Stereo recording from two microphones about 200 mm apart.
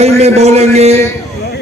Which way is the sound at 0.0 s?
30° right (ahead or behind).